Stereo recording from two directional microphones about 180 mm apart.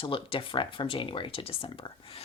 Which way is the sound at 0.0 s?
30° left (ahead or behind).